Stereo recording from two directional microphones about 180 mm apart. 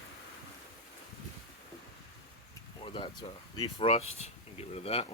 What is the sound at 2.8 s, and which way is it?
Speech, 25° left (ahead or behind).